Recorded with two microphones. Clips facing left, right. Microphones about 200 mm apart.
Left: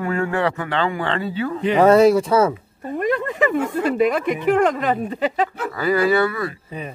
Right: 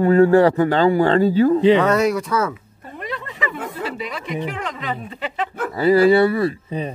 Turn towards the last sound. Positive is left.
turn(degrees=-30)  # may be behind; listen again after turning